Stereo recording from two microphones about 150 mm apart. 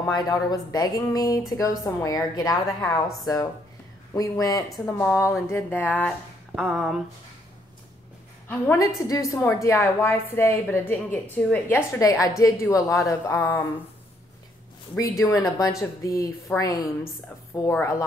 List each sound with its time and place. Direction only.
0.1 s a woman's voice: 25° left (ahead or behind)
4.1 s a woman's voice: 25° left (ahead or behind)
6.5 s a sound: centre (ahead or behind)
8.7 s a woman's voice: 20° left (ahead or behind)
12.0 s a woman's voice: 25° left (ahead or behind)
15.0 s a woman's voice: 20° left (ahead or behind)